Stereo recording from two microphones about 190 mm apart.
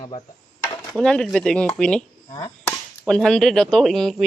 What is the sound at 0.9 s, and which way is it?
Speech, centre (ahead or behind).